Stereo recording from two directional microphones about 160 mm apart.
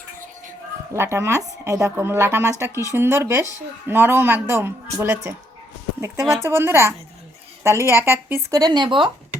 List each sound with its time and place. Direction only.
0.9 s a woman's voice: 15° right (ahead or behind)